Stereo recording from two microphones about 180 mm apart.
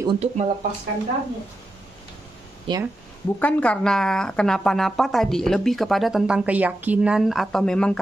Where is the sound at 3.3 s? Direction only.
10° left (ahead or behind).